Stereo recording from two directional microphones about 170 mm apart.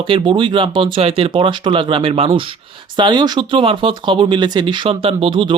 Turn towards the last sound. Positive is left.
turn(degrees=-30)  # may be behind; listen again after turning